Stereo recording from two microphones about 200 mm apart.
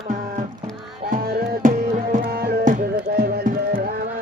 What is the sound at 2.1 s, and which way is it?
Music, 50° right (ahead or behind).